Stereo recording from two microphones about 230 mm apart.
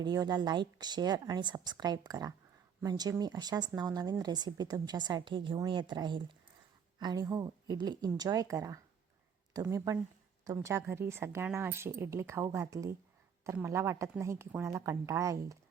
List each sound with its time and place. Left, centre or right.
0.0 s speech: centre